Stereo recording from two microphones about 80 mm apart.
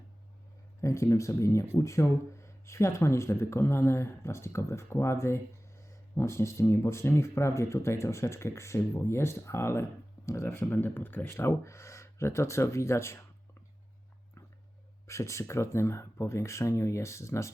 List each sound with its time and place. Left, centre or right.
0.8 s speech: left
15.0 s speech: left